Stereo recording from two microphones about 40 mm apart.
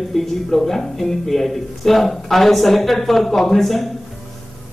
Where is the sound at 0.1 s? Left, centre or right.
Centre.